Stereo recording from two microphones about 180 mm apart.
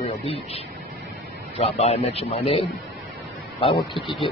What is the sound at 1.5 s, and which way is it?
A man's voice, 35° left (ahead or behind).